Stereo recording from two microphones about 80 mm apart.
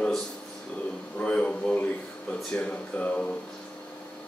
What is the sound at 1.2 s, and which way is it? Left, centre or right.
Speech, centre.